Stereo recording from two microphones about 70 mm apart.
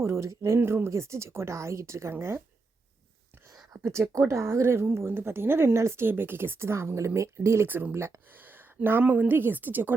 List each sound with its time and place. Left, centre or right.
0.0 s speech: right
3.8 s a woman's voice: right
8.4 s a woman's voice: right